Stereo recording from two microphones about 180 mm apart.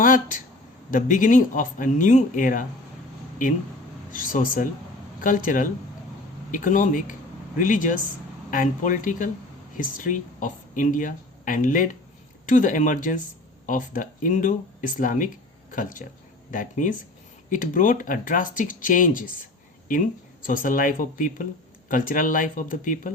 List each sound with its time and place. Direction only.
0.0 s speech: 50° left (ahead or behind)
4.1 s speech: 50° left (ahead or behind)
20.5 s speech: 50° left (ahead or behind)